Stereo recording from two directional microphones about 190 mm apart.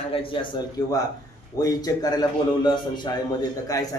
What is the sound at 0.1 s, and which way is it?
A man's voice, 25° left (ahead or behind).